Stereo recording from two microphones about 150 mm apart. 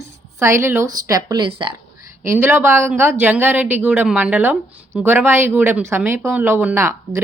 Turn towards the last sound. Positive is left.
turn(degrees=-15)  # may be behind; listen again after turning